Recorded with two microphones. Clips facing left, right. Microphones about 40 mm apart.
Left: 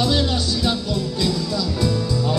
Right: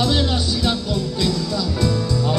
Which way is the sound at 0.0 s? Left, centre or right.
Centre.